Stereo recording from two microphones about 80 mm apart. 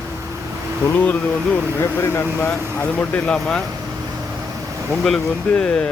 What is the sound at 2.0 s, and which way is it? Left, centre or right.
Speech, left.